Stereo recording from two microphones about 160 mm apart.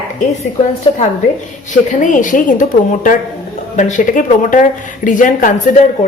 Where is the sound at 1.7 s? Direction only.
50° left (ahead or behind).